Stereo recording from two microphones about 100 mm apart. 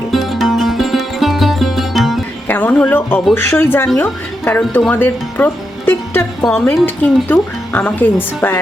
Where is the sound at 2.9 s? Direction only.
20° left (ahead or behind).